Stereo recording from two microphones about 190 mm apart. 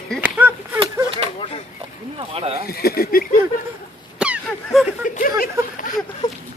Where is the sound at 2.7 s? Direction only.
55° left (ahead or behind).